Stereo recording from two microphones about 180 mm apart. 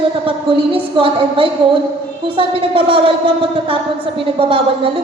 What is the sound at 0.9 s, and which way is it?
Speech, 30° right (ahead or behind).